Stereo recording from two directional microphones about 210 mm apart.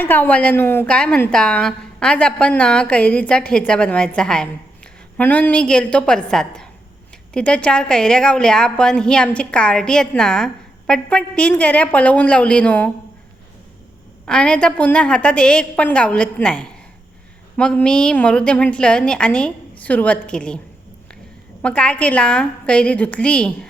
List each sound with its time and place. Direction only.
0.0 s a woman's voice: 10° left (ahead or behind)
14.3 s a woman's voice: 5° left (ahead or behind)
21.6 s a woman's voice: 5° left (ahead or behind)